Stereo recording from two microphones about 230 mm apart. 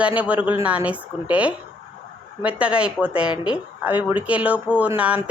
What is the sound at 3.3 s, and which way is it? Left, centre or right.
Speech, centre.